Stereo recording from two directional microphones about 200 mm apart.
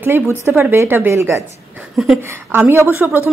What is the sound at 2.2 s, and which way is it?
A woman's voice, 10° right (ahead or behind).